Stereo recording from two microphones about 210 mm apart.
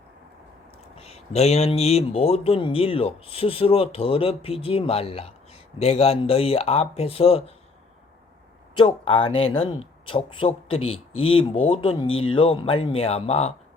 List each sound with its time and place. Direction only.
0.9 s speech: 30° left (ahead or behind)
8.7 s speech: 25° left (ahead or behind)
12.0 s speech: 75° left (ahead or behind)
12.3 s speech: 25° left (ahead or behind)